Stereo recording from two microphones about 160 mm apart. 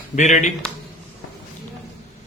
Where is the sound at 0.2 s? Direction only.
50° left (ahead or behind).